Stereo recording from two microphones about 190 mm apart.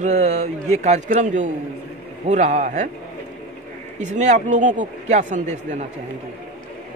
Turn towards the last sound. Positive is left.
turn(degrees=-40)  # may be behind; listen again after turning